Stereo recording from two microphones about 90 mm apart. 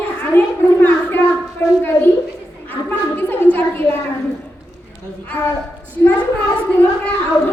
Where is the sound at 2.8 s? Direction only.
20° left (ahead or behind).